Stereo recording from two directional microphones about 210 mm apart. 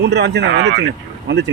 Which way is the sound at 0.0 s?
50° right (ahead or behind).